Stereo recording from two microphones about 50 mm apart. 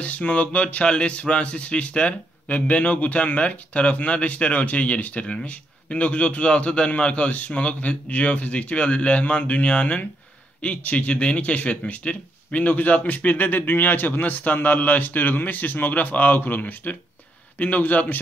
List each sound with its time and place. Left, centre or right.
0.0 s speech: left